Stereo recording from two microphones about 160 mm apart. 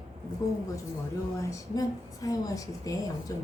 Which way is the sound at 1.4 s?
20° left (ahead or behind).